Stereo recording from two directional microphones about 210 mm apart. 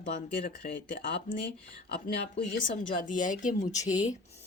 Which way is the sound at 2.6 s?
40° left (ahead or behind).